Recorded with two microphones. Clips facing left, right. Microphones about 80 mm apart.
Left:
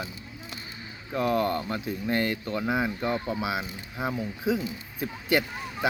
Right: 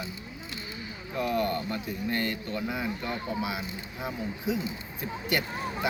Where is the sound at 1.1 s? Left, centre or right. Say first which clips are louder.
Left 3 dB; centre.